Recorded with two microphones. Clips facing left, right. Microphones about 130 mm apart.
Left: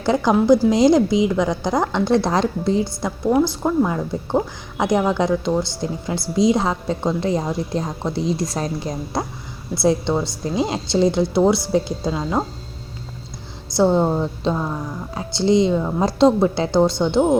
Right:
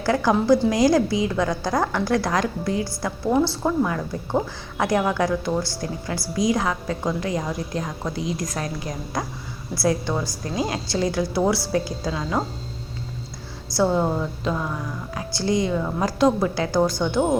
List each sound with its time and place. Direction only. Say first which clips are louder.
0.0 s a woman's voice: left 3 dB; 20° left (ahead or behind)
3.2 s a woman's voice: left 3 dB; 15° left (ahead or behind)
13.7 s a woman's voice: left 4 dB; 20° left (ahead or behind)